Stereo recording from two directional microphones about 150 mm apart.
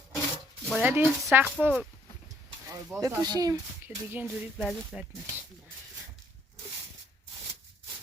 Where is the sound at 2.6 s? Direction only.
20° right (ahead or behind).